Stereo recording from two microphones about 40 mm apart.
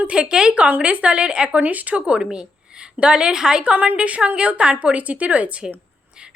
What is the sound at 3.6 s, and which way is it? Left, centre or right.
Speech, right.